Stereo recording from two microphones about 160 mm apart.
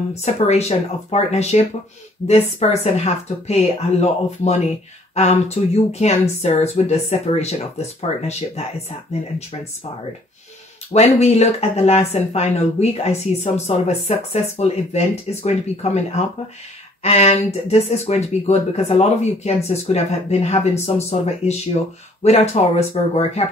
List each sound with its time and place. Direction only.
0.2 s speech: 45° left (ahead or behind)
10.9 s speech: 45° left (ahead or behind)